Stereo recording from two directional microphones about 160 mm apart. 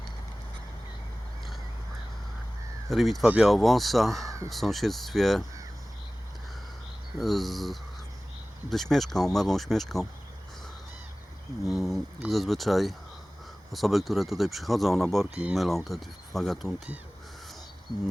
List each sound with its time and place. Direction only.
2.9 s speech: centre (ahead or behind)
7.2 s speech: centre (ahead or behind)
11.7 s speech: centre (ahead or behind)